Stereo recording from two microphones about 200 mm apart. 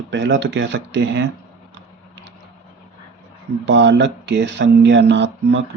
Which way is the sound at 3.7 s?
60° right (ahead or behind).